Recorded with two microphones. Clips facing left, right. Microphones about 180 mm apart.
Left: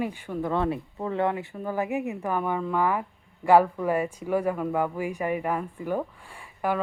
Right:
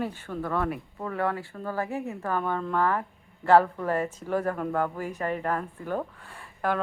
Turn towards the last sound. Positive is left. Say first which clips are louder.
# left 1 dB
turn(degrees=10)  # may be behind; listen again after turning